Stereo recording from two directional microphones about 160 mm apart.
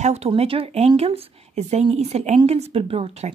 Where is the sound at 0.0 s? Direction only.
40° right (ahead or behind).